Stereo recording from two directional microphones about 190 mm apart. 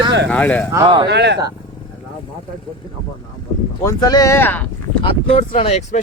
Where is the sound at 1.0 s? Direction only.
65° right (ahead or behind).